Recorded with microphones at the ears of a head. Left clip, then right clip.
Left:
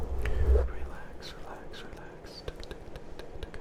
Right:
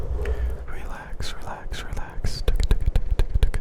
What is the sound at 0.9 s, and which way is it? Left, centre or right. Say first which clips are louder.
Whispering: right 8 dB; right.